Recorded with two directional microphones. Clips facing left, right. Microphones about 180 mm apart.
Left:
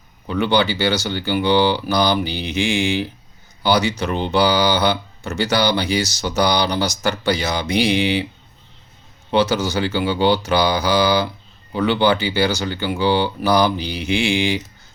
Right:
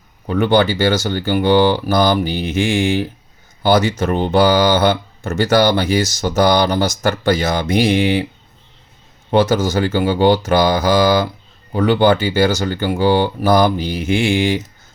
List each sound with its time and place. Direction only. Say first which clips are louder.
0.3 s speech: right 4 dB; 50° right (ahead or behind)
9.3 s speech: right 4 dB; 50° right (ahead or behind)